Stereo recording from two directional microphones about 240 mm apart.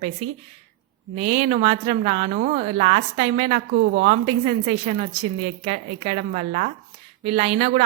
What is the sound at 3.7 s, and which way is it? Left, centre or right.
Speech, right.